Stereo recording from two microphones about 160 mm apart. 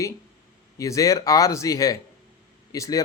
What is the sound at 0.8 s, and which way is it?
Speech, 20° left (ahead or behind).